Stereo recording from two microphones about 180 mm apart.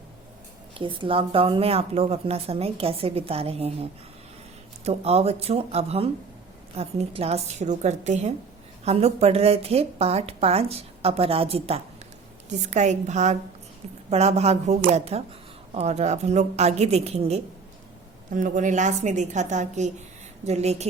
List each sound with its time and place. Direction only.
0.7 s a woman's voice: 30° right (ahead or behind)
4.9 s a woman's voice: 35° right (ahead or behind)
18.3 s a woman's voice: 45° right (ahead or behind)